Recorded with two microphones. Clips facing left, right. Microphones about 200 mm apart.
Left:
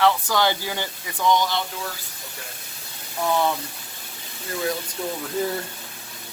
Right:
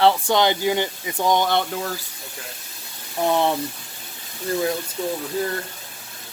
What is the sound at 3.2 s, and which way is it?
Speech, 30° right (ahead or behind).